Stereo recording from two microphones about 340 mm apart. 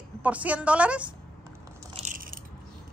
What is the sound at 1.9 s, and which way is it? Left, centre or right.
Biting, right.